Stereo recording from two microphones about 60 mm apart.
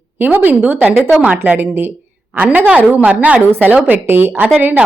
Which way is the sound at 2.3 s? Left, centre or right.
Right.